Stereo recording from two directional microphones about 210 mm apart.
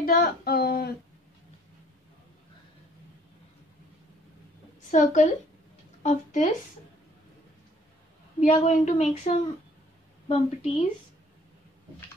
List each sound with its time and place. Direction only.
0.0 s speech: 45° left (ahead or behind)
4.9 s a woman's voice: 35° left (ahead or behind)
8.4 s a woman's voice: 35° left (ahead or behind)